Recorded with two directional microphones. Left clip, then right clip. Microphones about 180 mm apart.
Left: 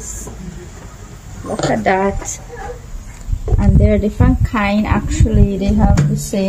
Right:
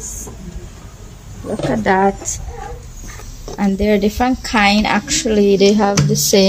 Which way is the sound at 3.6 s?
55° right (ahead or behind).